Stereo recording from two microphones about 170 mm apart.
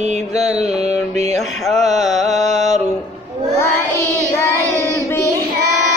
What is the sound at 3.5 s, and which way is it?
Child singing, 15° left (ahead or behind).